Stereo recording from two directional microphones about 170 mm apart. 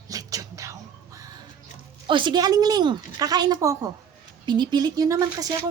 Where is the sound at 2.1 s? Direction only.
30° right (ahead or behind).